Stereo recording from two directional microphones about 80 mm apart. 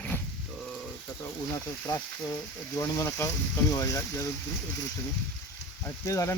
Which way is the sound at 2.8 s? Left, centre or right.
Left.